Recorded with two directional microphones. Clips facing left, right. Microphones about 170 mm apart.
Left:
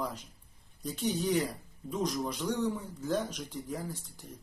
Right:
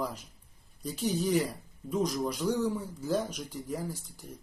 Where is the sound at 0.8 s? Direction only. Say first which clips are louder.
Right 1 dB; 5° right (ahead or behind).